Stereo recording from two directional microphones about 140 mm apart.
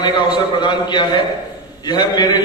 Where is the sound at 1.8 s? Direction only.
30° left (ahead or behind).